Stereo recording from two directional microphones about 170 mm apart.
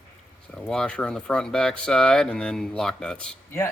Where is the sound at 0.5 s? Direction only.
5° left (ahead or behind).